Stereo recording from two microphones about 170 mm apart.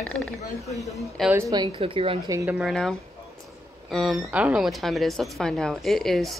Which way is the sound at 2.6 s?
5° left (ahead or behind).